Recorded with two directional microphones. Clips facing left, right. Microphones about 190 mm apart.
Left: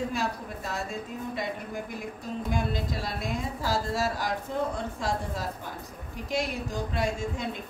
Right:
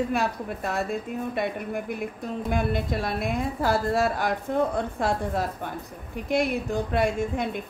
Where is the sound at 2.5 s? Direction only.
60° right (ahead or behind).